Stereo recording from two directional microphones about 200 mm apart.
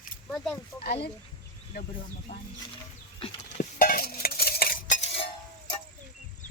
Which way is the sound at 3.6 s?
45° left (ahead or behind).